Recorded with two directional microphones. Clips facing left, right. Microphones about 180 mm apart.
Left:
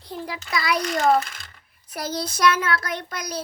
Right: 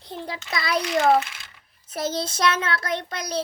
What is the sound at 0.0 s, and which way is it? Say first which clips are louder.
Speech: left 1 dB; 25° right (ahead or behind).